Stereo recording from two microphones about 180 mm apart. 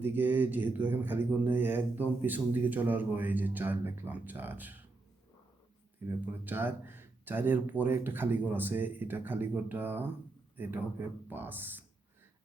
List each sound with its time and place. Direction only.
0.0 s speech: 10° right (ahead or behind)
6.1 s speech: 10° right (ahead or behind)